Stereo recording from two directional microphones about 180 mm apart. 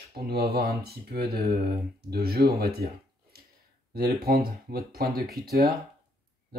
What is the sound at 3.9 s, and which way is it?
Speech, 60° right (ahead or behind).